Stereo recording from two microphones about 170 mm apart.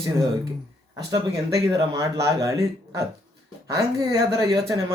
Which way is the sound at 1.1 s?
25° right (ahead or behind).